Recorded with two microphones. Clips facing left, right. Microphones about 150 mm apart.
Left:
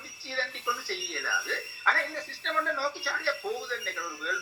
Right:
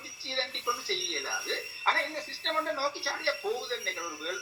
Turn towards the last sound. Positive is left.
turn(degrees=-30)  # may be behind; listen again after turning